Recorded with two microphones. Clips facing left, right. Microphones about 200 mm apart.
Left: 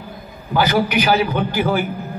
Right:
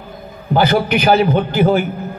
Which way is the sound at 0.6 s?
50° right (ahead or behind).